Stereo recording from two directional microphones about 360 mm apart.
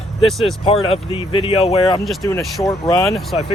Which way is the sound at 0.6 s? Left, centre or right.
Centre.